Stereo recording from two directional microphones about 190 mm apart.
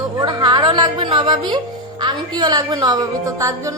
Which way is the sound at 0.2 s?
20° right (ahead or behind).